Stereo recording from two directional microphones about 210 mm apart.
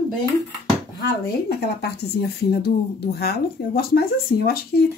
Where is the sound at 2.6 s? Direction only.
50° left (ahead or behind).